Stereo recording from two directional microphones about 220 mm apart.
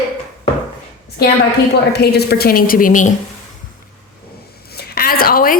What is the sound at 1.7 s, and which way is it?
A woman's voice, 50° left (ahead or behind).